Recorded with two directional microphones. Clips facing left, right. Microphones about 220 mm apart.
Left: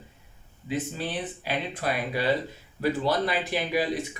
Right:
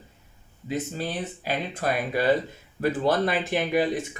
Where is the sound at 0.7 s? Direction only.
45° right (ahead or behind).